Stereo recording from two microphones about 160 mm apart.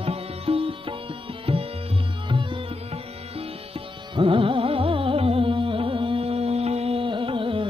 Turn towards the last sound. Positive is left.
turn(degrees=-35)  # may be behind; listen again after turning